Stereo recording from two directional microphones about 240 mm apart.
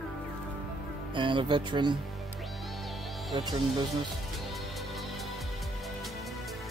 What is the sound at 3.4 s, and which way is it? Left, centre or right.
Speech, centre.